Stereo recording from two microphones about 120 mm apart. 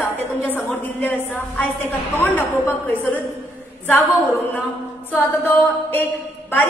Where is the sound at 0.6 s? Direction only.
15° left (ahead or behind).